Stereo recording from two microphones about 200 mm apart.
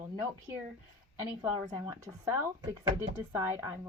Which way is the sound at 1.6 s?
20° right (ahead or behind).